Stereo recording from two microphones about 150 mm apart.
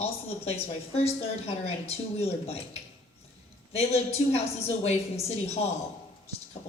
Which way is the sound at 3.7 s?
45° left (ahead or behind).